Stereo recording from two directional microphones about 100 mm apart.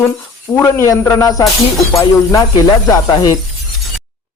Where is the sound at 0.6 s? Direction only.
25° left (ahead or behind).